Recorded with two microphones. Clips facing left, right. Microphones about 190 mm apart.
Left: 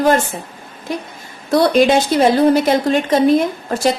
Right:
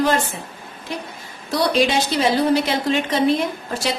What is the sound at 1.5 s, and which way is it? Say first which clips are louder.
A woman's voice: left 7 dB; 50° left (ahead or behind).